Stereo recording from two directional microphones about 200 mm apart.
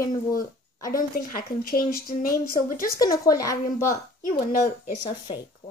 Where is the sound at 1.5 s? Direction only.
50° left (ahead or behind).